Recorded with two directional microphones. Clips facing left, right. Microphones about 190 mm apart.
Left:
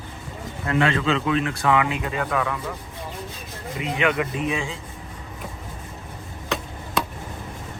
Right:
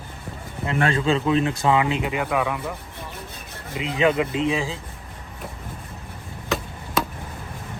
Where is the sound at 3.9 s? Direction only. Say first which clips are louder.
Right 3 dB; 30° right (ahead or behind).